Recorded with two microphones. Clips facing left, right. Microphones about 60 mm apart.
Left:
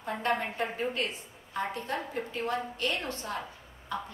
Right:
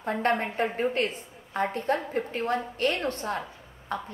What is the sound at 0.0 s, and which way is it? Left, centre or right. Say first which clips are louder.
A woman's voice: right 4 dB; right.